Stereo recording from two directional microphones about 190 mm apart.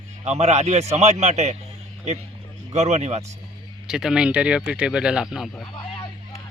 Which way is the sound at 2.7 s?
35° right (ahead or behind).